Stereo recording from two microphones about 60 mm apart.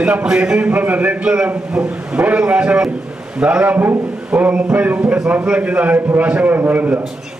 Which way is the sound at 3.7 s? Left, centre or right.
Right.